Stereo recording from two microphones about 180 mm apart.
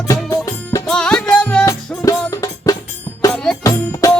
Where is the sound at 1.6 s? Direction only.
20° left (ahead or behind).